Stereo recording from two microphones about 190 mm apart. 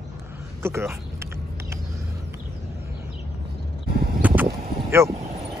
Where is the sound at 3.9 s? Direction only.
55° right (ahead or behind).